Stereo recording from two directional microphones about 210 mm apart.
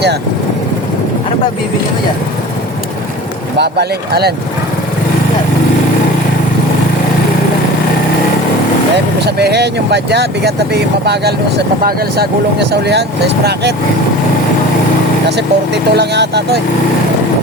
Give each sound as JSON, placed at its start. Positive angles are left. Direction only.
{"t": 3.6, "sound": "speech", "side_deg": -50}
{"t": 9.2, "sound": "speech", "side_deg": -50}
{"t": 15.4, "sound": "speech", "side_deg": -55}